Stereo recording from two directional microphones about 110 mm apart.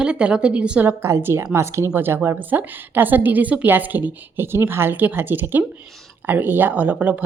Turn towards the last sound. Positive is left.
turn(degrees=-15)  # may be behind; listen again after turning